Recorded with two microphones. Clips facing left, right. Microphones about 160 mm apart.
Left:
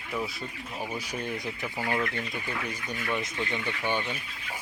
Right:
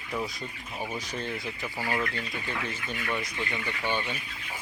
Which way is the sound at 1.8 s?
Centre (ahead or behind).